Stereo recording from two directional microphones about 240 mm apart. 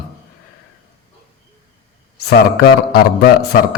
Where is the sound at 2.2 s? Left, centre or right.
Left.